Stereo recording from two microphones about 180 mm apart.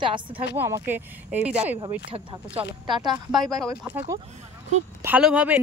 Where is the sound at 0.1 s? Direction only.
30° right (ahead or behind).